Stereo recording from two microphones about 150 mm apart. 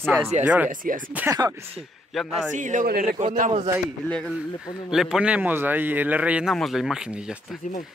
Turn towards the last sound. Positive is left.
turn(degrees=60)  # may be behind; listen again after turning